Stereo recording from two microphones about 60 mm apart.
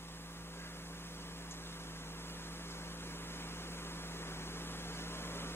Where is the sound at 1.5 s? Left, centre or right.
Left.